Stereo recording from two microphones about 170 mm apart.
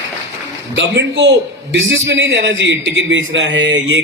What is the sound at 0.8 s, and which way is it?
A man's voice, 90° right.